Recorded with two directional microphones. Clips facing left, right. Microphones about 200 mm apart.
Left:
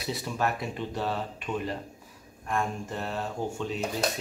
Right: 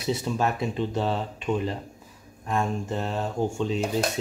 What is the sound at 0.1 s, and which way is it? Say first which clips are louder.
Speech: right 4 dB; 25° right (ahead or behind).